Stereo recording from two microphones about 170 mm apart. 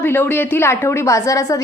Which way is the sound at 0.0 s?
10° left (ahead or behind).